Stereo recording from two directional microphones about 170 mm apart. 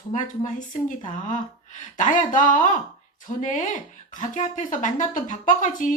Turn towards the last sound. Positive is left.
turn(degrees=50)  # may be behind; listen again after turning